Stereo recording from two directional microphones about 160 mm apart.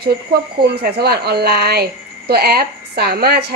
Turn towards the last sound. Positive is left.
turn(degrees=-75)  # may be behind; listen again after turning